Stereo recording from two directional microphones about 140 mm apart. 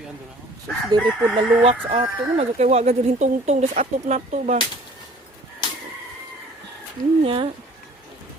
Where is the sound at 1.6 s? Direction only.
45° right (ahead or behind).